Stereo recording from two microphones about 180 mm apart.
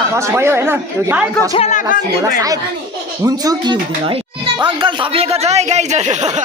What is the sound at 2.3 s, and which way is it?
A child's voice, 20° right (ahead or behind).